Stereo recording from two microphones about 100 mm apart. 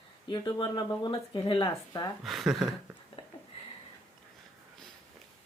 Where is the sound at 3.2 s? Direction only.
65° left (ahead or behind).